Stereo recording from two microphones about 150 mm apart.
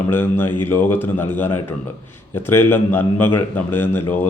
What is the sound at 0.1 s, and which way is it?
A man's voice, 15° left (ahead or behind).